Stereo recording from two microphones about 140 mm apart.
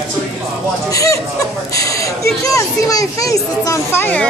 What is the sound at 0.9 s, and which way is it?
Speech, 25° left (ahead or behind).